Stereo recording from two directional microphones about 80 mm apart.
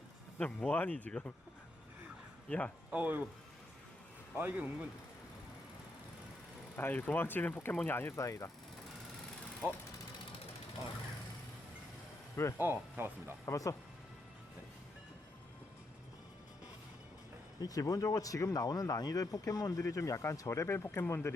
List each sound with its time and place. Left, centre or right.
0.3 s speech: centre
2.5 s speech: centre
2.9 s speech: centre
4.4 s speech: centre
6.7 s speech: left
8.1 s speech: left
12.5 s speech: right
13.4 s speech: left
17.6 s speech: left